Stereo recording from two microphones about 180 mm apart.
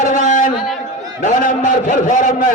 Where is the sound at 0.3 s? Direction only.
45° left (ahead or behind).